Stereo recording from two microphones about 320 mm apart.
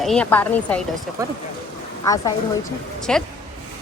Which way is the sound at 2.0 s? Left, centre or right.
Centre.